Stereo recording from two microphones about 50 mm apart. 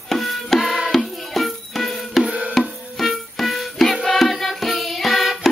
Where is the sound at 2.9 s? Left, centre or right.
Centre.